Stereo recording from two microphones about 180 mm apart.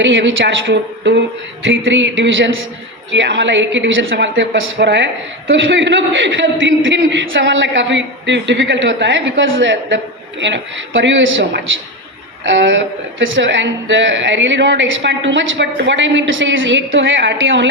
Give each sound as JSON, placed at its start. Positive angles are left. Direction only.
{"t": 0.0, "sound": "a woman's voice", "side_deg": -90}
{"t": 1.6, "sound": "speech", "side_deg": -90}
{"t": 5.5, "sound": "speech", "side_deg": -90}